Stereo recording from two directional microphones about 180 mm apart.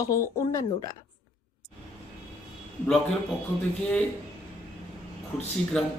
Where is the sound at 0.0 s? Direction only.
20° left (ahead or behind).